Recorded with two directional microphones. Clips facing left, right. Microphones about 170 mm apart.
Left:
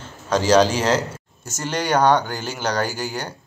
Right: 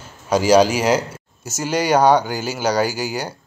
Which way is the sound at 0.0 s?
10° right (ahead or behind).